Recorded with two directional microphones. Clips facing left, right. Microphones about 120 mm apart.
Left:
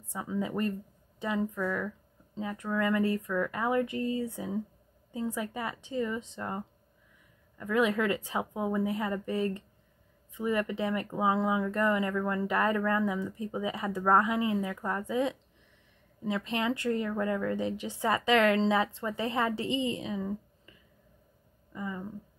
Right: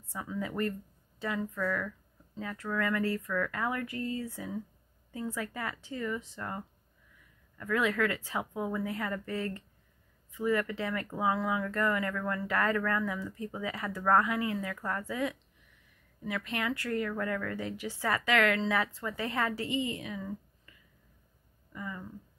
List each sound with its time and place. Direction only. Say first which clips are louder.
0.1 s speech: left 3 dB; 20° left (ahead or behind)
21.7 s speech: left 3 dB; 20° left (ahead or behind)